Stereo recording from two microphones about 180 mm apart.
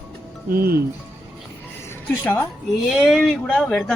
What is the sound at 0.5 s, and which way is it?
Speech, 55° right (ahead or behind).